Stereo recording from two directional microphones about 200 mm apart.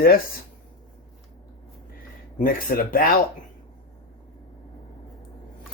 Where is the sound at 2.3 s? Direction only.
45° left (ahead or behind).